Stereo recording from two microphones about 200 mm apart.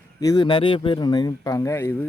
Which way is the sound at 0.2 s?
20° left (ahead or behind).